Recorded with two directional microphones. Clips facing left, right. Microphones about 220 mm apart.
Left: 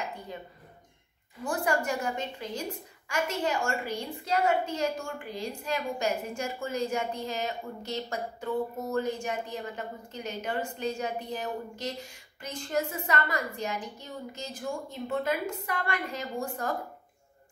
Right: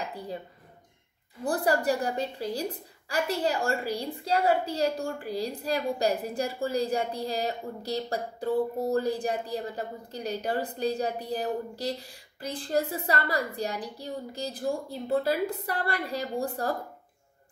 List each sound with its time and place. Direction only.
1.4 s a woman's voice: 35° right (ahead or behind)